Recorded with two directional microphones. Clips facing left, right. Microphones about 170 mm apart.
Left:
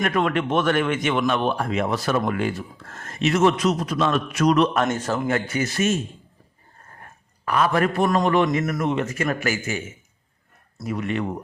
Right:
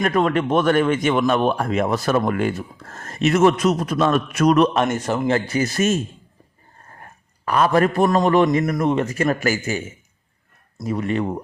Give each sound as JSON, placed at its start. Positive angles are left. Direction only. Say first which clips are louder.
{"t": 0.0, "sound": "speech", "louder": "right 3 dB", "side_deg": -35}
{"t": 4.9, "sound": "a man's voice", "louder": "right 2 dB", "side_deg": -10}
{"t": 5.3, "sound": "a man's voice", "louder": "right 3 dB", "side_deg": -35}
{"t": 7.4, "sound": "a man's voice", "louder": "right 3 dB", "side_deg": -35}
{"t": 10.8, "sound": "a man's voice", "louder": "right 3 dB", "side_deg": -35}